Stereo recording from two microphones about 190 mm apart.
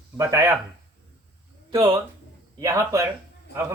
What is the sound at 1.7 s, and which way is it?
Speech, 20° right (ahead or behind).